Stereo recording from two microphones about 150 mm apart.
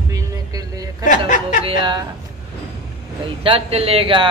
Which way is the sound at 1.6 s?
35° right (ahead or behind).